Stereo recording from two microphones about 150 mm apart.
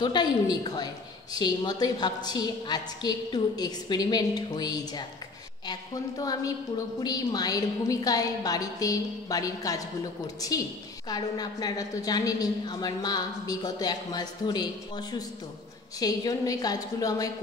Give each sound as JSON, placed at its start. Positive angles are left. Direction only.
{"t": 0.0, "sound": "a woman's voice", "side_deg": 30}